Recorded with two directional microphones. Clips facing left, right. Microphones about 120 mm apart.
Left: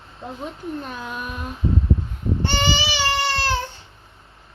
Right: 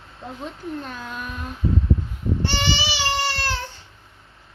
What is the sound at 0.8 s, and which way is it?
Speech, 15° left (ahead or behind).